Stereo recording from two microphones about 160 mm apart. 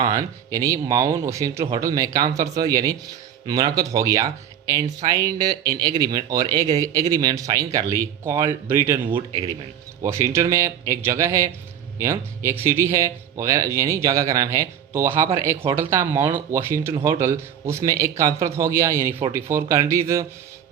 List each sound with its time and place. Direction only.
0.0 s speech: 20° right (ahead or behind)
10.0 s speech: 15° right (ahead or behind)